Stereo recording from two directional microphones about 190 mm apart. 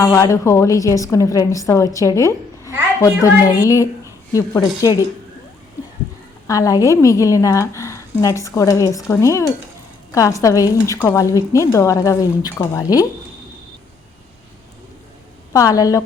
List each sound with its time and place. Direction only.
0.0 s a woman's voice: 15° left (ahead or behind)
6.5 s a woman's voice: 15° left (ahead or behind)
15.5 s a woman's voice: 20° left (ahead or behind)